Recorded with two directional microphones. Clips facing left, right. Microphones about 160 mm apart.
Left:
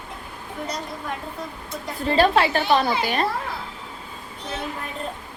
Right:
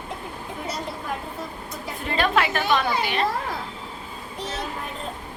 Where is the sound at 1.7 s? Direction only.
30° left (ahead or behind).